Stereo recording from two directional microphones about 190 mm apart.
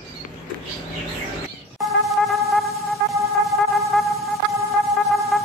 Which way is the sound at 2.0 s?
Centre (ahead or behind).